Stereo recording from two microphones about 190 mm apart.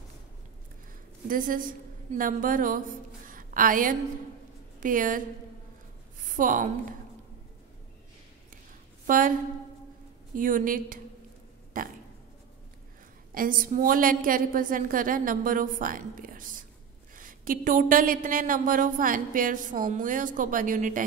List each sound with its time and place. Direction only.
1.2 s speech: 45° right (ahead or behind)
3.3 s a sound: 45° right (ahead or behind)
4.7 s a woman's voice: 45° right (ahead or behind)
6.3 s speech: 45° right (ahead or behind)
9.0 s a woman's voice: 45° right (ahead or behind)
10.3 s speech: 45° right (ahead or behind)
11.7 s a sound: 45° right (ahead or behind)
13.3 s speech: 50° right (ahead or behind)